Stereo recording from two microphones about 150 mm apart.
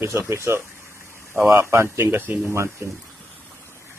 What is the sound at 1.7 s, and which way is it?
Speech, 20° right (ahead or behind).